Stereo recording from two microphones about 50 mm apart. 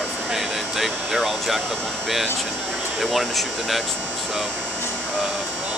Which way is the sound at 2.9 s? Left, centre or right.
Centre.